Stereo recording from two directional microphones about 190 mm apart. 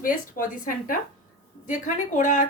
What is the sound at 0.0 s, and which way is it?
A woman's voice, 45° left (ahead or behind).